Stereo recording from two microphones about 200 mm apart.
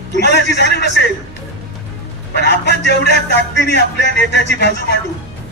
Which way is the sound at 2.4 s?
55° left (ahead or behind).